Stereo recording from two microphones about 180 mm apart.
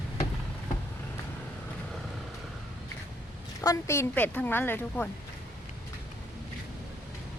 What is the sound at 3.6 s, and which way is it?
A woman's voice, 15° left (ahead or behind).